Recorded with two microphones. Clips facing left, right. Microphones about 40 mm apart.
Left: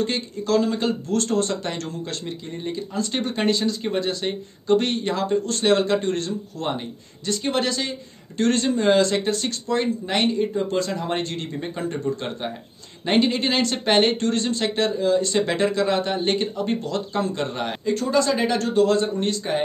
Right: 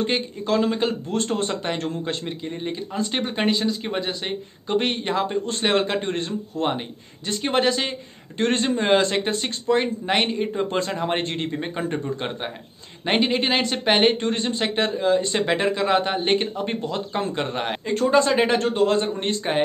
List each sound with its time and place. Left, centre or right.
0.0 s speech: right